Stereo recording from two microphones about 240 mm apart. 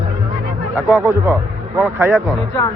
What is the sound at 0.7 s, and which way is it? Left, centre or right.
A man's voice, centre.